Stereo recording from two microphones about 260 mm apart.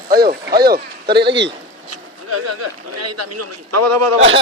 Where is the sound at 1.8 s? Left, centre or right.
Right.